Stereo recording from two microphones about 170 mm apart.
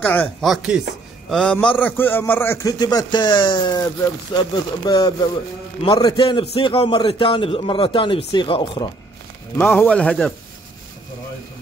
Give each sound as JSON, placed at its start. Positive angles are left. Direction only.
{"t": 0.0, "sound": "speech", "side_deg": 10}
{"t": 0.5, "sound": "a man's voice", "side_deg": -5}
{"t": 9.6, "sound": "speech", "side_deg": 10}